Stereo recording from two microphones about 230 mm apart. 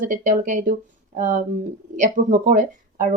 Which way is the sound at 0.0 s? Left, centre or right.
Right.